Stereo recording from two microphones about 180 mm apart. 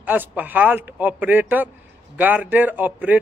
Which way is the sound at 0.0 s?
10° right (ahead or behind).